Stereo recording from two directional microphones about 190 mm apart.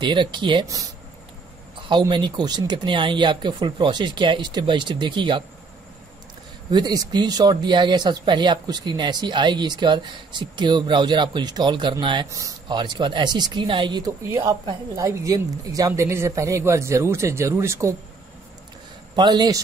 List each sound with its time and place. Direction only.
0.0 s speech: 25° right (ahead or behind)
6.7 s speech: 20° right (ahead or behind)
19.1 s speech: 20° right (ahead or behind)